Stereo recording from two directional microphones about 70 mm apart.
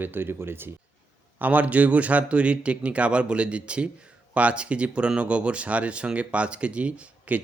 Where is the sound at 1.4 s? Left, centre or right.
Right.